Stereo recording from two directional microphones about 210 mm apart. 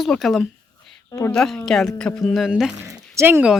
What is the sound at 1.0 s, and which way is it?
Speech, 15° left (ahead or behind).